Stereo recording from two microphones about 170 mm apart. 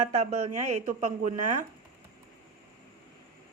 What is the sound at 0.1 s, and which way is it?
Speech, 40° right (ahead or behind).